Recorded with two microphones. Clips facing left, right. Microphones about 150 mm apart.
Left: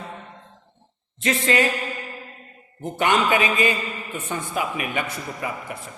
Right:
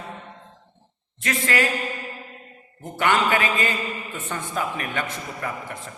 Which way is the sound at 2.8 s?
20° left (ahead or behind).